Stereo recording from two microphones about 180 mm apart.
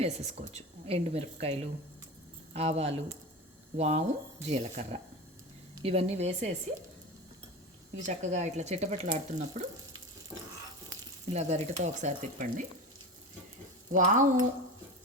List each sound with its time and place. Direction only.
0.0 s speech: 35° right (ahead or behind)
7.9 s speech: 40° right (ahead or behind)
10.3 s a sound: 5° right (ahead or behind)
11.3 s speech: 40° right (ahead or behind)
13.9 s frying: 45° right (ahead or behind)